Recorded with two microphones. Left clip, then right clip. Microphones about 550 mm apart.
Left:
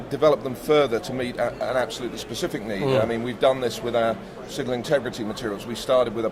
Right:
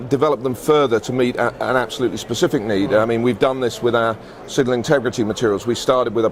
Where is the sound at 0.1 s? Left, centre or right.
Right.